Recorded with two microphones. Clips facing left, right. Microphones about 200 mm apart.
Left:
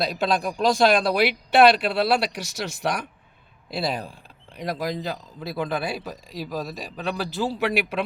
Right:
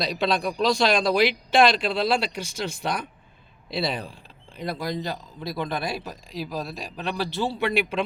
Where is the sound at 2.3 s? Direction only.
80° left.